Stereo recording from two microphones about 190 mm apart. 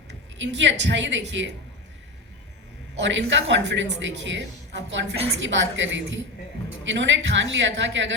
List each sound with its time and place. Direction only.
0.3 s a woman's voice: 70° right (ahead or behind)
3.0 s a woman's voice: 75° right (ahead or behind)